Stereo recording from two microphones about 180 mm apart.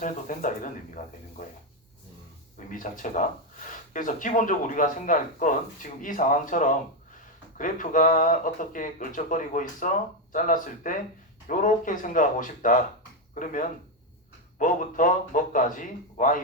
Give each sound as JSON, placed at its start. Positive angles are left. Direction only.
{"t": 0.0, "sound": "speech", "side_deg": 45}
{"t": 2.6, "sound": "speech", "side_deg": 45}